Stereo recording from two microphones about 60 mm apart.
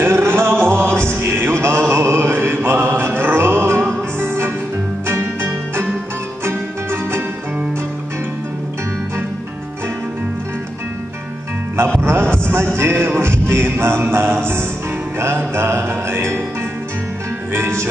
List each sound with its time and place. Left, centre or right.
0.0 s a sound: right
0.7 s music: right
12.0 s music: right
12.4 s a sound: right
12.7 s music: right
17.5 s music: right